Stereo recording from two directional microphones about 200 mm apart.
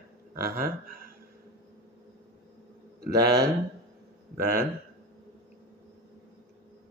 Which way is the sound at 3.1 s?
15° right (ahead or behind).